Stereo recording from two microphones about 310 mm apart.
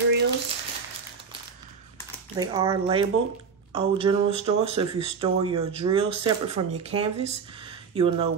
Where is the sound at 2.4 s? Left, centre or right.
Centre.